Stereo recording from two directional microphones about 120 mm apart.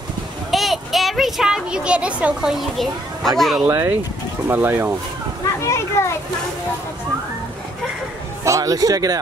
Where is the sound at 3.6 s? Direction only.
15° right (ahead or behind).